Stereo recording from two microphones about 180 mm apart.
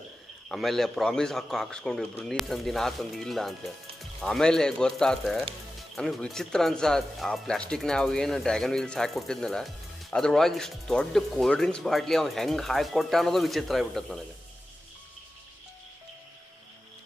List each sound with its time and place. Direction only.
0.5 s speech: centre (ahead or behind)